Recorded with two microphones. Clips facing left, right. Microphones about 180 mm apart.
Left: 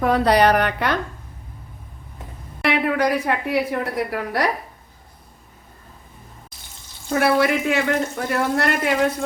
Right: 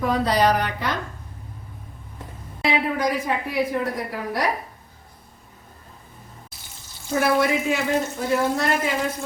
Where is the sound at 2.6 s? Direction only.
65° left (ahead or behind).